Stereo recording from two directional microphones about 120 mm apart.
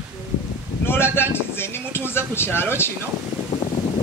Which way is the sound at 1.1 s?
20° left (ahead or behind).